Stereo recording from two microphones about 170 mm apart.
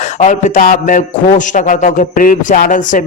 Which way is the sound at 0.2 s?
45° left (ahead or behind).